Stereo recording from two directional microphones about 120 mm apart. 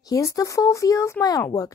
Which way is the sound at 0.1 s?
30° left (ahead or behind).